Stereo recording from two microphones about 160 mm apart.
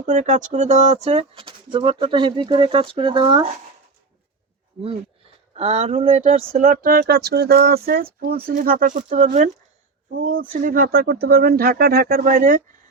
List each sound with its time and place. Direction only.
0.0 s speech: 50° right (ahead or behind); by 3.4 s 30° right (ahead or behind)
4.8 s speech: 35° right (ahead or behind)
10.2 s speech: 60° right (ahead or behind)